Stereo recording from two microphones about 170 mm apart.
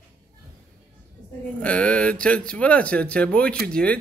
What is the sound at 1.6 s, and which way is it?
Speech, 5° left (ahead or behind).